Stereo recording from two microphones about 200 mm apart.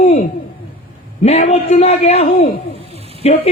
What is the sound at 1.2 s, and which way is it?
A man's voice, 35° left (ahead or behind).